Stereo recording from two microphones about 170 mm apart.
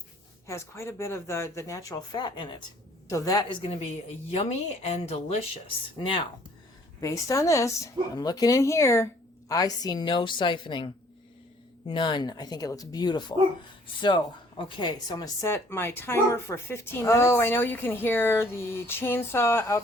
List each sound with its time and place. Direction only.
0.4 s speech: 15° left (ahead or behind)
4.9 s speech: 35° left (ahead or behind)
7.0 s speech: 20° left (ahead or behind)